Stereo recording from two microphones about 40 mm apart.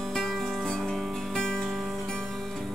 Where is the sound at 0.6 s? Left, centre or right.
Centre.